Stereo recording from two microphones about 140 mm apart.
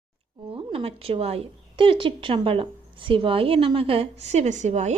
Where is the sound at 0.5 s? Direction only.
45° right (ahead or behind).